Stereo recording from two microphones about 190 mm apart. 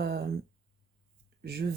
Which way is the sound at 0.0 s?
55° right (ahead or behind).